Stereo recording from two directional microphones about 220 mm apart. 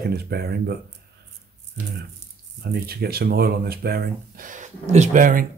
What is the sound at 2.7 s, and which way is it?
Speech, 45° right (ahead or behind).